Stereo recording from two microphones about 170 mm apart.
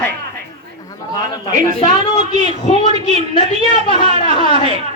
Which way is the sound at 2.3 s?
30° left (ahead or behind).